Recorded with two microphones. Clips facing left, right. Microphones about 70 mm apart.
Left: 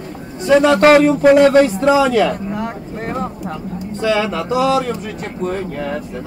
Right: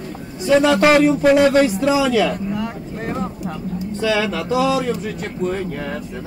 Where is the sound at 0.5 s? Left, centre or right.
Left.